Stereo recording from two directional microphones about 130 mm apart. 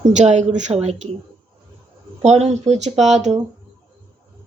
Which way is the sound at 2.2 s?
60° right (ahead or behind).